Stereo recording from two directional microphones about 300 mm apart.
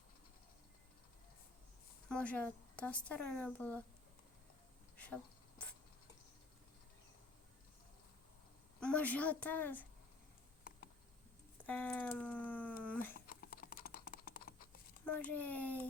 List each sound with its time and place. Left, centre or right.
2.0 s speech: centre
4.9 s a sound: centre
8.8 s speech: centre
10.7 s a sound: left
11.6 s speech: centre
13.1 s computer keyboard: left
15.0 s speech: centre